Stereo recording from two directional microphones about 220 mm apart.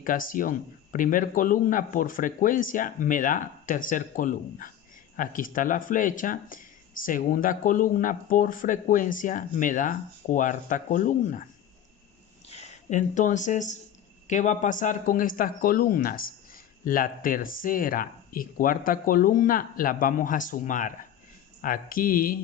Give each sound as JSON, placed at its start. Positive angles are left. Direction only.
{"t": 0.0, "sound": "speech", "side_deg": 40}
{"t": 12.5, "sound": "speech", "side_deg": 30}